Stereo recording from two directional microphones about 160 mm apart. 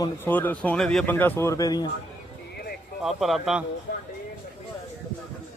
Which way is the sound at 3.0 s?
Centre (ahead or behind).